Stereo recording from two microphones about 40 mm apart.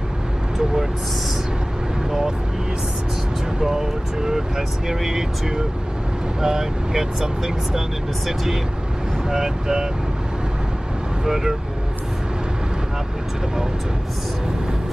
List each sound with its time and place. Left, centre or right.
3.6 s speech: centre
6.4 s speech: centre
9.3 s speech: centre
11.2 s speech: centre